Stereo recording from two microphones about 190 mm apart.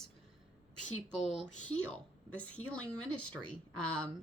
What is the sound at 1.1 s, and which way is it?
Speech, 5° left (ahead or behind).